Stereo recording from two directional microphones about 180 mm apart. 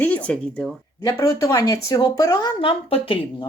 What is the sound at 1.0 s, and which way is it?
A woman's voice, 20° left (ahead or behind).